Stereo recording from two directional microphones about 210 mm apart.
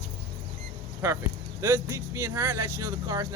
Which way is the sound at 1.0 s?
10° right (ahead or behind).